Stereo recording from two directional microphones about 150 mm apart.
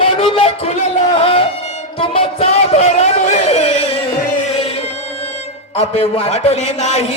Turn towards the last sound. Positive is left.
turn(degrees=50)  # may be behind; listen again after turning